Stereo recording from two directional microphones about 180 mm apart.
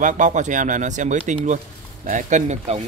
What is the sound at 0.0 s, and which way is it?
Speech, 45° right (ahead or behind).